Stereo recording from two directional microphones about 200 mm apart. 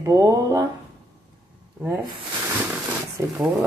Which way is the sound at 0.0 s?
15° right (ahead or behind).